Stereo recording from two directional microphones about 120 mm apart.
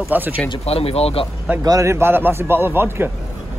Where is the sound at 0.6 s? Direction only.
55° left (ahead or behind).